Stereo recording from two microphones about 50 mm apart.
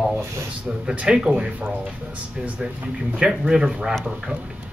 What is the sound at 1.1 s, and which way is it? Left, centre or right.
Speech, centre.